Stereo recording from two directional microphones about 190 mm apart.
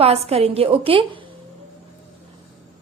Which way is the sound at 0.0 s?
30° right (ahead or behind).